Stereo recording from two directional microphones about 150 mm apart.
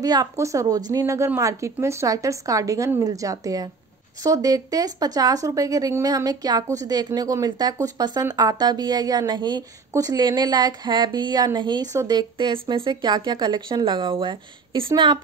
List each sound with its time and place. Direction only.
0.0 s a woman's voice: 25° right (ahead or behind)